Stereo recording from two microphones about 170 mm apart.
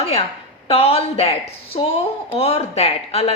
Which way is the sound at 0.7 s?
35° left (ahead or behind).